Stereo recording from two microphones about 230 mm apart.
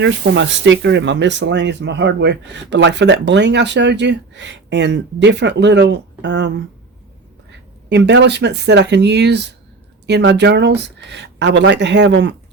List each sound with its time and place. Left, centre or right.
0.0 s speech: right
7.9 s speech: right